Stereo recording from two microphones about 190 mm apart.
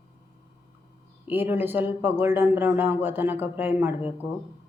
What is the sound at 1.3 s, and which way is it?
A man's voice, 10° right (ahead or behind).